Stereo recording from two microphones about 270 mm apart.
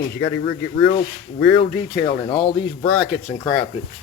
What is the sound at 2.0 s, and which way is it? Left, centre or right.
Speech, centre.